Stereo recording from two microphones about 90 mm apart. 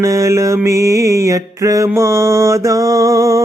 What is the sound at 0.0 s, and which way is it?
Mantra, 35° right (ahead or behind).